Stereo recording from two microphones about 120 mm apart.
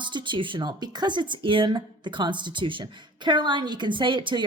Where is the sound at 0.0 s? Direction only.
40° right (ahead or behind).